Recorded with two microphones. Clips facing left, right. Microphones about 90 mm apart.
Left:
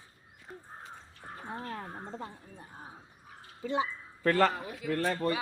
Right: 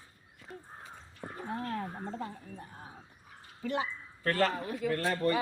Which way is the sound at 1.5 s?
20° left (ahead or behind).